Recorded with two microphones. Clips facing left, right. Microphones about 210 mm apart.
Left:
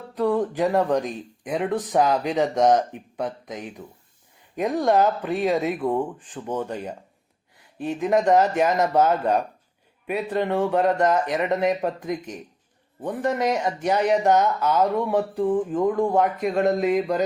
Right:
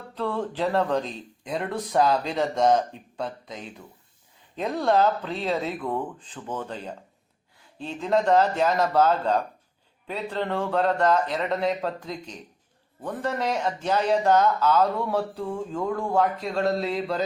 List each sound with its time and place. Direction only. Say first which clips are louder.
0.1 s speech: left 6 dB; 15° left (ahead or behind)